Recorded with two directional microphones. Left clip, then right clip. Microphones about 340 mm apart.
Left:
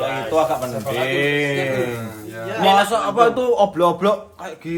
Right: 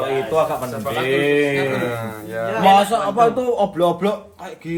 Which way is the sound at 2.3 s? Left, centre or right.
Centre.